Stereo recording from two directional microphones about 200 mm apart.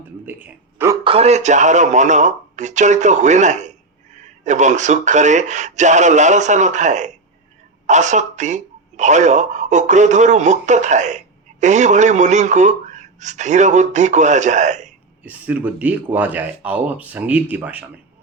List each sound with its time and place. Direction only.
0.3 s a man's voice: 10° right (ahead or behind)
1.0 s speech: 30° right (ahead or behind)
15.2 s speech: 5° right (ahead or behind)